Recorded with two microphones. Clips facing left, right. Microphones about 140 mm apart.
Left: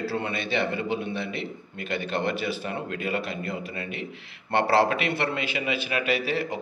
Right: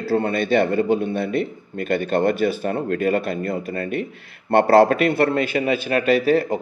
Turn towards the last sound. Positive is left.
turn(degrees=-45)  # may be behind; listen again after turning